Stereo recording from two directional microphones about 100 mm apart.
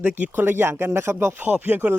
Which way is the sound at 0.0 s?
15° right (ahead or behind).